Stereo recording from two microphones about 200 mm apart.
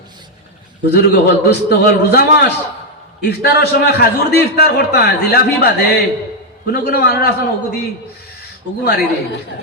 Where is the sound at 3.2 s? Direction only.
55° left (ahead or behind).